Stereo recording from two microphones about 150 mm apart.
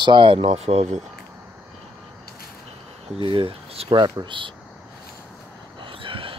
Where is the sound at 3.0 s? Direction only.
40° right (ahead or behind).